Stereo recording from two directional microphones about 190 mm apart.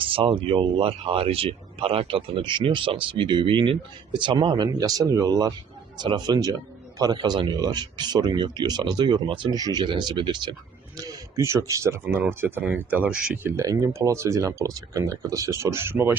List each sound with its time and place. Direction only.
0.0 s speech: 30° right (ahead or behind); by 16.1 s 10° right (ahead or behind)